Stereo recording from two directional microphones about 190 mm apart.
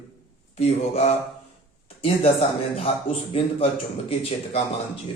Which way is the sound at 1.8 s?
30° left (ahead or behind).